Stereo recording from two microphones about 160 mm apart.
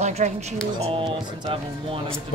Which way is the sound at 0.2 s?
50° right (ahead or behind).